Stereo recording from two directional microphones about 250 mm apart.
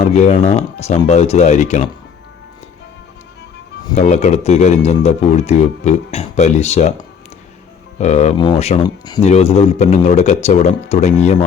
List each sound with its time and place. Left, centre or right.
0.0 s speech: left
3.9 s speech: left
7.9 s speech: left